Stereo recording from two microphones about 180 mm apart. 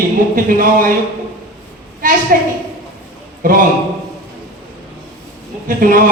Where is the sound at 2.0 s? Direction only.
45° right (ahead or behind).